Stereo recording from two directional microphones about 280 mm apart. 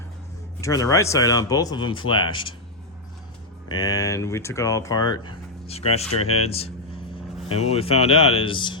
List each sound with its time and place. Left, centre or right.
0.6 s speech: centre
3.7 s speech: centre